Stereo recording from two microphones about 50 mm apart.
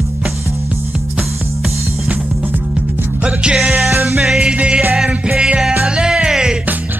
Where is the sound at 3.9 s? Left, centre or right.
Right.